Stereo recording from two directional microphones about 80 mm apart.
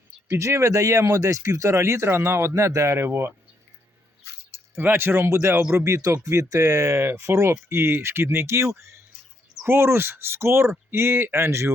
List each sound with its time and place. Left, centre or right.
0.3 s speech: right
4.5 s speech: right